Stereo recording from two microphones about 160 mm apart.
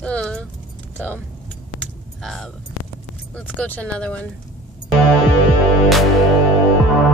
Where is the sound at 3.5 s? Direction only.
10° left (ahead or behind).